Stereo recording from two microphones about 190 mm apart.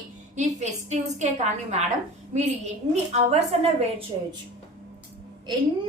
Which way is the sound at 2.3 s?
40° right (ahead or behind).